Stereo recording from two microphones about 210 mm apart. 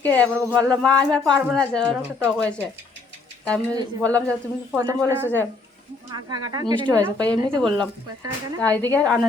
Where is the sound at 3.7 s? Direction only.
20° right (ahead or behind).